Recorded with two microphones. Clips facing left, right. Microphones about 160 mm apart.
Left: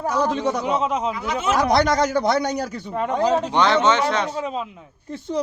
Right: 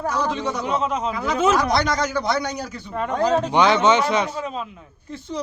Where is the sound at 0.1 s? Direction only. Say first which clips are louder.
Left 5 dB; 50° left (ahead or behind).